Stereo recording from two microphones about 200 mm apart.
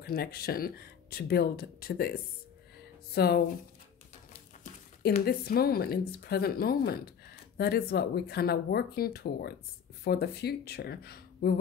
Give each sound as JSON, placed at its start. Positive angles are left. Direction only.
{"t": 0.0, "sound": "speech", "side_deg": 50}
{"t": 5.0, "sound": "speech", "side_deg": 50}